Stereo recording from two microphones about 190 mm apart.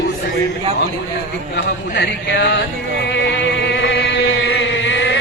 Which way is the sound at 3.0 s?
65° left (ahead or behind).